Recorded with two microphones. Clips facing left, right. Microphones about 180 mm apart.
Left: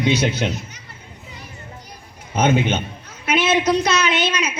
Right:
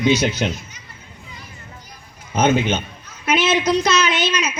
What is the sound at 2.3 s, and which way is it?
Speech, 55° left (ahead or behind).